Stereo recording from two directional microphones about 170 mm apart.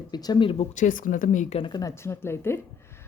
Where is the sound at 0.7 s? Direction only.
50° left (ahead or behind).